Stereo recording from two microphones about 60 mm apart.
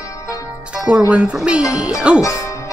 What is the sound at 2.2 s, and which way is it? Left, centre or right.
Music, left.